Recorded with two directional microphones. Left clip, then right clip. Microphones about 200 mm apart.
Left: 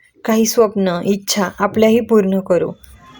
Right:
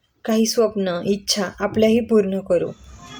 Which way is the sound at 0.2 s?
20° left (ahead or behind).